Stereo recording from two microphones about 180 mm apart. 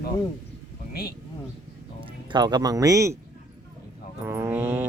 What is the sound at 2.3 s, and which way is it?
Speech, 25° right (ahead or behind).